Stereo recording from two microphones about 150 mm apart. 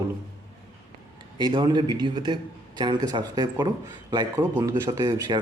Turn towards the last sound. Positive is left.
turn(degrees=-25)  # may be behind; listen again after turning